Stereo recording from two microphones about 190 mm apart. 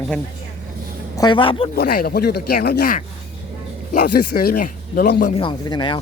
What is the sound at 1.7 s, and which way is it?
Speech, 55° left (ahead or behind).